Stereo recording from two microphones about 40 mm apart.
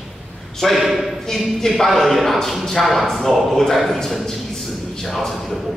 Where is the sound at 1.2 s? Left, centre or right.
Centre.